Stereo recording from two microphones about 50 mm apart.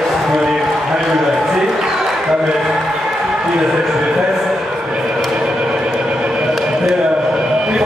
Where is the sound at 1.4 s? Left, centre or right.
Centre.